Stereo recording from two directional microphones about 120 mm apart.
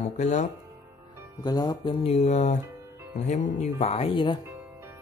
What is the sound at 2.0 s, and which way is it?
Speech, 60° left (ahead or behind).